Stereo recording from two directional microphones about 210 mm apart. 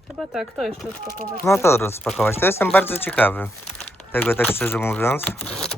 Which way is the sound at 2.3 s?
10° left (ahead or behind).